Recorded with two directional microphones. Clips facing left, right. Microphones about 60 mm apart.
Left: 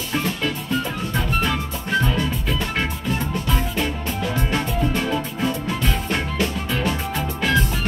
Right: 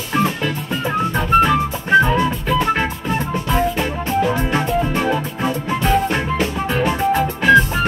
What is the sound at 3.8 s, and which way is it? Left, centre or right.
Music, right.